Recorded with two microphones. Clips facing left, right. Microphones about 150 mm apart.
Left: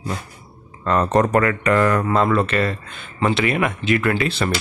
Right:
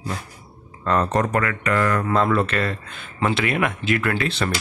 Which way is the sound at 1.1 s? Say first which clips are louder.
Left 5 dB; 35° left (ahead or behind).